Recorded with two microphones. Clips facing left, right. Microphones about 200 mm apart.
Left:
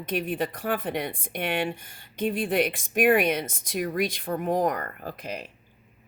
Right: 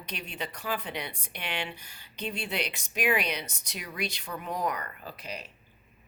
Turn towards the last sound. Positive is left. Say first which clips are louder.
# left 6 dB
turn(degrees=50)  # may be behind; listen again after turning